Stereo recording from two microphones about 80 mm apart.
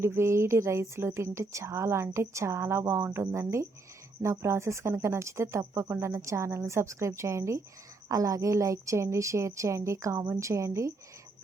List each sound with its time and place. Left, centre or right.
0.0 s a woman's voice: right